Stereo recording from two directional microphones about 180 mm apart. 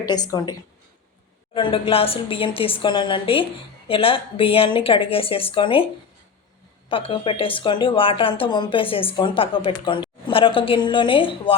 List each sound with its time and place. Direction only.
0.1 s a woman's voice: 20° left (ahead or behind)
1.5 s speech: 30° left (ahead or behind)
6.8 s a woman's voice: 30° left (ahead or behind)